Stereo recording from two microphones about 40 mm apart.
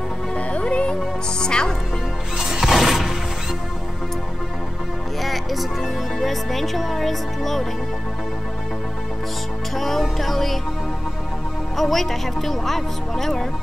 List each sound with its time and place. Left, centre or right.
0.5 s music: left
1.4 s speech: centre
2.3 s music: centre
5.2 s speech: centre
9.8 s a woman's voice: centre
11.7 s a woman's voice: centre